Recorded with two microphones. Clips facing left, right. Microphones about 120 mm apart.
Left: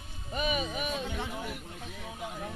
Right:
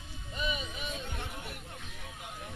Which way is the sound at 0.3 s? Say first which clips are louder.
Left 6 dB; 70° left (ahead or behind).